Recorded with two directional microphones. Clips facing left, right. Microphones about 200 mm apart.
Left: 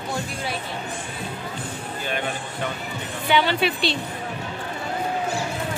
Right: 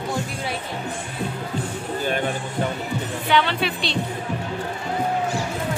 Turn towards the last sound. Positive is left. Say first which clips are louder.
# left 2 dB
turn(degrees=5)  # may be behind; listen again after turning